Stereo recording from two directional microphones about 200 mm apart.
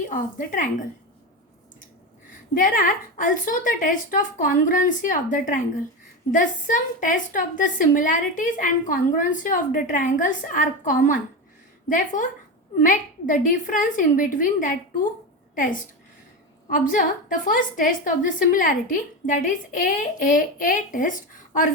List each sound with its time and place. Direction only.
0.1 s a woman's voice: 40° left (ahead or behind)
2.6 s a woman's voice: 40° left (ahead or behind)